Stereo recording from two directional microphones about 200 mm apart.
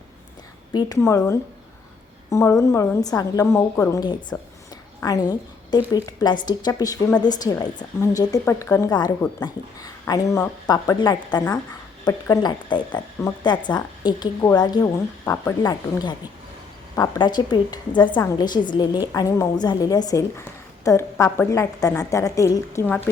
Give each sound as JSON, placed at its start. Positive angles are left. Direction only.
{"t": 0.7, "sound": "a woman's voice", "side_deg": 20}